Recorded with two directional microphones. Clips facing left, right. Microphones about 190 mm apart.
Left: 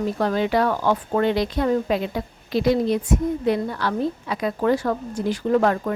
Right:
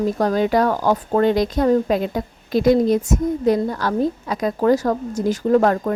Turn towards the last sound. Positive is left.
turn(degrees=-40)  # may be behind; listen again after turning